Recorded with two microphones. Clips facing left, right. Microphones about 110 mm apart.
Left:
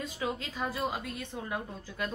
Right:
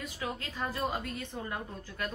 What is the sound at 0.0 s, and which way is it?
A woman's voice, 20° left (ahead or behind).